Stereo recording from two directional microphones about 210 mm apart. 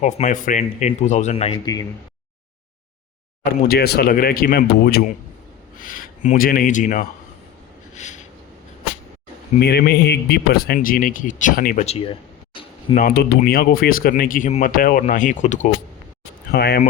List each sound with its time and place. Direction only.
0.0 s speech: 35° left (ahead or behind)
3.7 s speech: 50° left (ahead or behind)
9.6 s speech: 50° left (ahead or behind); by 12.1 s 30° left (ahead or behind)
13.0 s speech: 45° left (ahead or behind)
16.5 s speech: 50° left (ahead or behind)